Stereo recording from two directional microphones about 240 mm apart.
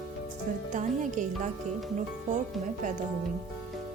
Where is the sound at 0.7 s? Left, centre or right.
Right.